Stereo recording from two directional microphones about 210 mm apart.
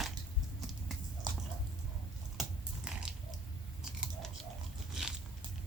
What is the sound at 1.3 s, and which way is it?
Chewing, 20° right (ahead or behind).